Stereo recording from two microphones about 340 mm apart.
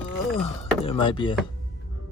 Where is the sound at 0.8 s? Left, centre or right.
Centre.